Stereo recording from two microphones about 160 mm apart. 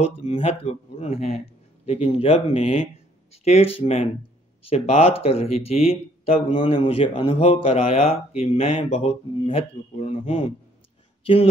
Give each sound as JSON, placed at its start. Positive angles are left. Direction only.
{"t": 0.0, "sound": "speech", "side_deg": 40}